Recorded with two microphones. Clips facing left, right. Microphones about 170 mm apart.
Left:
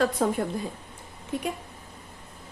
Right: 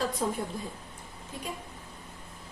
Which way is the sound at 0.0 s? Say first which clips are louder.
Left 6 dB; 65° left (ahead or behind).